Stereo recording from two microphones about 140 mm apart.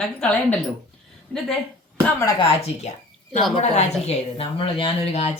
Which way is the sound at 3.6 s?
50° left (ahead or behind).